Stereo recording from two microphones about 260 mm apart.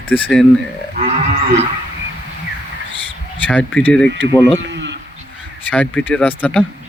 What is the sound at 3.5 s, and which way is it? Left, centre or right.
Speech, centre.